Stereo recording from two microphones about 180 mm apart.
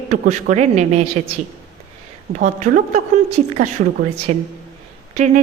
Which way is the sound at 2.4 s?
40° right (ahead or behind).